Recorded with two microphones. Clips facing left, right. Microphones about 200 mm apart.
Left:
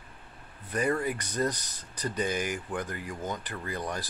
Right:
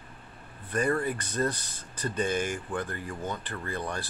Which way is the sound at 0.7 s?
10° left (ahead or behind).